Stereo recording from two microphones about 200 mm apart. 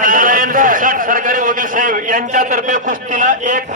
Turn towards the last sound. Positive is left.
turn(degrees=-40)  # may be behind; listen again after turning